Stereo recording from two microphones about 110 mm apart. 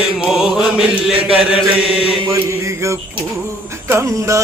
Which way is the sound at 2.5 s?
25° right (ahead or behind).